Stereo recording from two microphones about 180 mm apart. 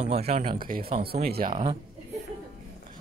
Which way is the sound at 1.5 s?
30° right (ahead or behind).